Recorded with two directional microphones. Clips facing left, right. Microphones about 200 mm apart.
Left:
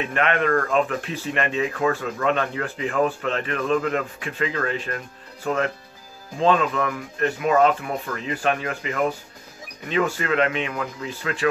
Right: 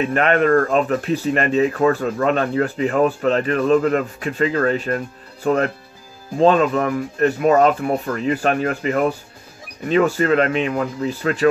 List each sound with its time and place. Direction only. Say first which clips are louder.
0.1 s speech: right 5 dB; 40° right (ahead or behind)